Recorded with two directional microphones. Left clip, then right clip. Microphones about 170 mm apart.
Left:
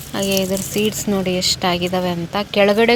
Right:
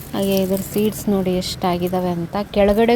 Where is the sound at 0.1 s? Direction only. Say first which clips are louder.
Even; 15° right (ahead or behind).